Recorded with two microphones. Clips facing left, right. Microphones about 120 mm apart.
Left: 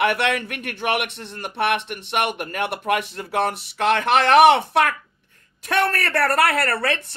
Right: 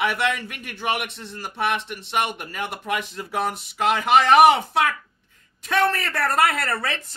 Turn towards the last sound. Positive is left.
turn(degrees=65)  # may be behind; listen again after turning